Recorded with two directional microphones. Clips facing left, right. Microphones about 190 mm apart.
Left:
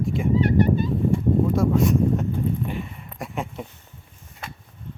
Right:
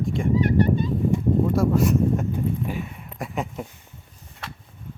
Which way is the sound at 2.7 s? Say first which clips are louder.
Right 1 dB; 5° right (ahead or behind).